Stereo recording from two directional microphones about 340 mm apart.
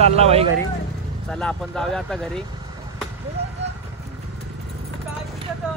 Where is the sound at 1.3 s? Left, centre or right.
Centre.